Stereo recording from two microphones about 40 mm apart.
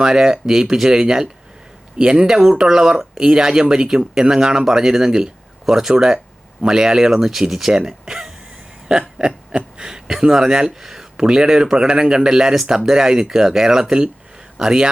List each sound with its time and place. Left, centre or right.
0.0 s speech: centre